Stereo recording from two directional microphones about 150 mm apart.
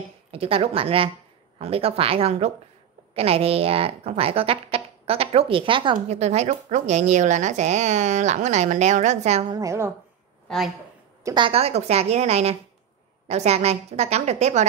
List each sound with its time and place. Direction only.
0.3 s speech: 40° right (ahead or behind)
5.9 s a woman's voice: 45° right (ahead or behind)
9.5 s a woman's voice: 20° right (ahead or behind)
11.2 s a woman's voice: 30° right (ahead or behind); by 14.7 s 50° right (ahead or behind)